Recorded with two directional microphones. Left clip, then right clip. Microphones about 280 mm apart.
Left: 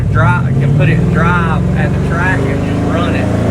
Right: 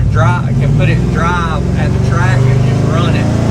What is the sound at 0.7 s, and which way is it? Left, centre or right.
Speech, centre.